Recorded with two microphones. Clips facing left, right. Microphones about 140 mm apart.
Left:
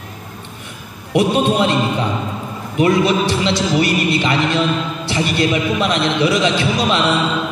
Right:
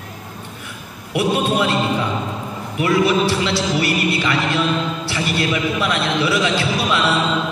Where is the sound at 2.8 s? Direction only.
20° left (ahead or behind).